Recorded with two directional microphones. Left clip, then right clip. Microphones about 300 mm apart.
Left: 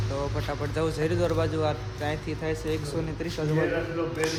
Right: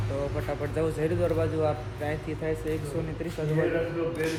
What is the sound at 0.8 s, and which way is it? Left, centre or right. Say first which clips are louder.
Speech: left 1 dB; centre.